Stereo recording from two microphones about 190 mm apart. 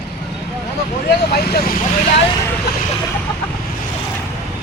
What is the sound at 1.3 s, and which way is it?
Speech, 55° left (ahead or behind).